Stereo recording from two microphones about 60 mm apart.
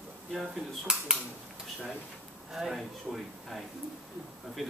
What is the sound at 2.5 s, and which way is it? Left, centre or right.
A man's voice, centre.